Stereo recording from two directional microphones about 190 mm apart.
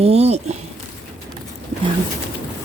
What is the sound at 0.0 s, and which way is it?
Speech, 35° right (ahead or behind).